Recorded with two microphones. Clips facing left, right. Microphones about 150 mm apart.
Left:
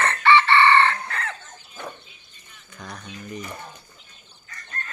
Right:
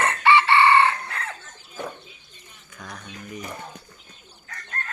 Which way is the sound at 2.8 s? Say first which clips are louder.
Left 1 dB; centre (ahead or behind).